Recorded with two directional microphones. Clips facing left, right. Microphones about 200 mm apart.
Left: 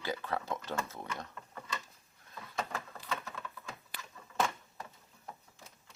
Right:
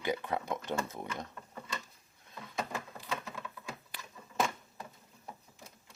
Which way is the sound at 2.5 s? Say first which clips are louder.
Right 1 dB; 10° right (ahead or behind).